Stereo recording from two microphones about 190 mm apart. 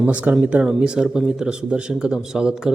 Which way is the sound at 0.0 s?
5° right (ahead or behind).